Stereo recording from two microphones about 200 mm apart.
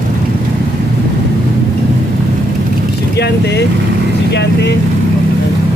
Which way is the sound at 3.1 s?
55° left (ahead or behind).